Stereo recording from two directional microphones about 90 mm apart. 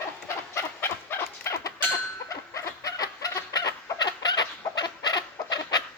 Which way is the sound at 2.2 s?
35° left (ahead or behind).